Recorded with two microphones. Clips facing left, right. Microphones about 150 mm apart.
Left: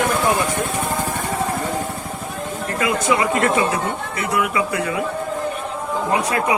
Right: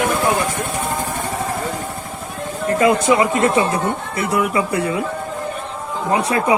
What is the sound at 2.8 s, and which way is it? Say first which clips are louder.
Speech: right 4 dB; 30° right (ahead or behind).